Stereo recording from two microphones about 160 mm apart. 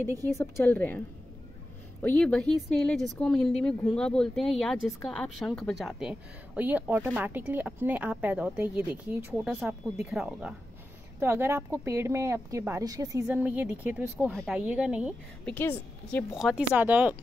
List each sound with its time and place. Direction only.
0.4 s a woman's voice: 15° left (ahead or behind); by 13.2 s 20° right (ahead or behind)
13.3 s speech: 10° right (ahead or behind)
14.3 s speech: 5° left (ahead or behind)
14.6 s speech: 10° right (ahead or behind)
15.4 s a woman's voice: 10° left (ahead or behind)
16.3 s speech: 5° right (ahead or behind)